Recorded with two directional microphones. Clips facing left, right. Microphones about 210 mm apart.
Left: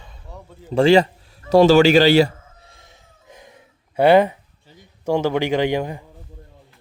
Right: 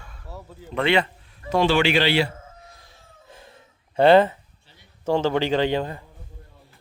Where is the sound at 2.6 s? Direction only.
25° left (ahead or behind).